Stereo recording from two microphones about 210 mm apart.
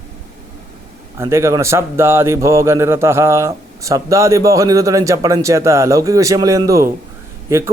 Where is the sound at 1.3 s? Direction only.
15° right (ahead or behind).